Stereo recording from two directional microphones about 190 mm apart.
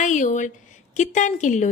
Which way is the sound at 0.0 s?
40° left (ahead or behind).